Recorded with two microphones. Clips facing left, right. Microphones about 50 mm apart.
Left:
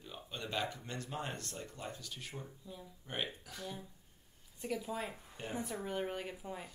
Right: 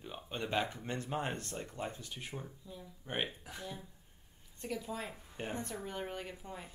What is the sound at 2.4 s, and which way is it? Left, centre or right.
Speech, centre.